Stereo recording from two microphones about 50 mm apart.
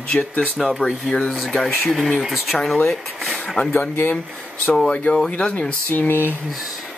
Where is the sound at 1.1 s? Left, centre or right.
Centre.